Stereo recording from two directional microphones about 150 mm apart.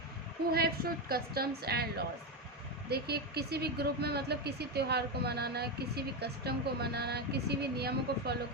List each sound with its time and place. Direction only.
0.5 s speech: 90° right